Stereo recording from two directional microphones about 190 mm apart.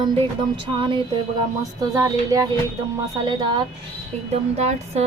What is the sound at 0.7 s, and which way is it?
Speech, 25° right (ahead or behind).